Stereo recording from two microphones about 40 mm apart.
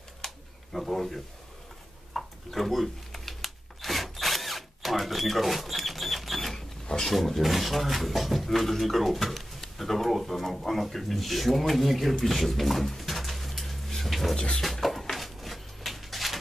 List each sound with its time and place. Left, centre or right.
0.7 s speech: centre
12.2 s pigeon: centre
14.3 s music: centre
14.6 s a sound: centre